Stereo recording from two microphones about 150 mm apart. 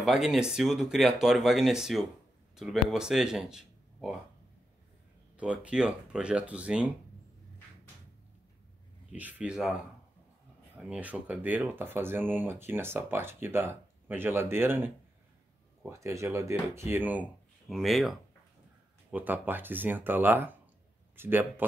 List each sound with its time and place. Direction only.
0.0 s speech: 5° right (ahead or behind)
5.4 s speech: 10° right (ahead or behind)
9.1 s speech: 10° right (ahead or behind)
10.8 s speech: 10° right (ahead or behind)
15.9 s speech: 20° right (ahead or behind)
17.6 s speech: centre (ahead or behind)
19.0 s speech: 10° right (ahead or behind)